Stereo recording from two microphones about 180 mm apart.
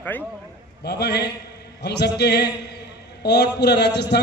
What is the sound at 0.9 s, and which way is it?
A man's voice, 65° left (ahead or behind).